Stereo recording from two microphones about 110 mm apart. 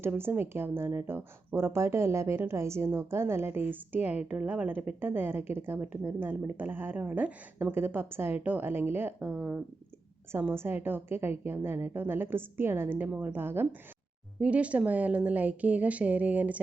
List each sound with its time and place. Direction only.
0.0 s a woman's voice: 20° right (ahead or behind)